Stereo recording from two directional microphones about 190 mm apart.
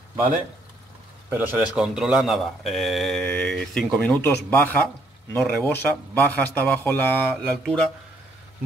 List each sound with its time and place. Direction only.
1.3 s a man's voice: 10° right (ahead or behind)